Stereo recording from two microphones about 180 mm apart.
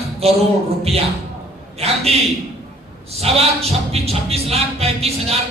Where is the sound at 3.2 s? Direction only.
35° right (ahead or behind).